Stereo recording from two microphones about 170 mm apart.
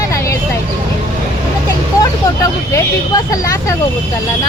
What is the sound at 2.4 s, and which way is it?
Speech, 20° left (ahead or behind).